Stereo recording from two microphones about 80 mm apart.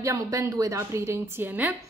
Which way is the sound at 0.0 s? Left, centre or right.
Right.